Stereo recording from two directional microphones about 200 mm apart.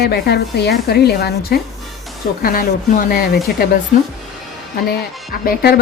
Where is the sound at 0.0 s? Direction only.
55° left (ahead or behind).